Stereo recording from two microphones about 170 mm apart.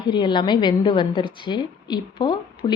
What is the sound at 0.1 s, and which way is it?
A woman's voice, 25° left (ahead or behind).